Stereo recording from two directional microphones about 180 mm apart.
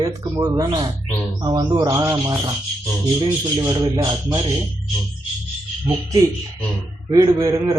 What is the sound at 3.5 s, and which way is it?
Speech, 20° right (ahead or behind).